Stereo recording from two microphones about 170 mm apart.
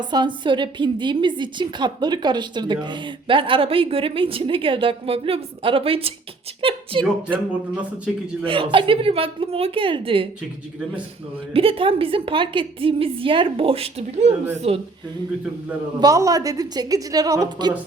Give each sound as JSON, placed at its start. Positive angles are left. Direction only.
{"t": 0.0, "sound": "a woman's voice", "side_deg": -25}
{"t": 7.8, "sound": "speech", "side_deg": -5}
{"t": 8.4, "sound": "a woman's voice", "side_deg": -30}
{"t": 11.5, "sound": "a woman's voice", "side_deg": -35}
{"t": 16.0, "sound": "a woman's voice", "side_deg": -20}